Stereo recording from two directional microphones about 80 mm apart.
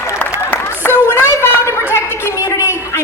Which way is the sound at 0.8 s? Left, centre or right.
Left.